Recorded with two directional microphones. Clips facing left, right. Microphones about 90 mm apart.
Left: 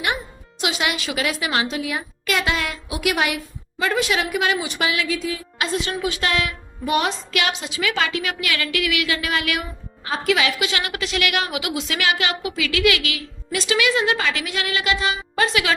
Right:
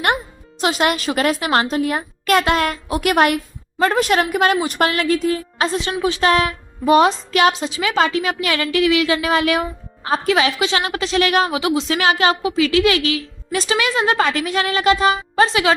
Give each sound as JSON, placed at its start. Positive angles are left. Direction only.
{"t": 0.6, "sound": "a child's voice", "side_deg": -40}
{"t": 5.5, "sound": "a woman's voice", "side_deg": -35}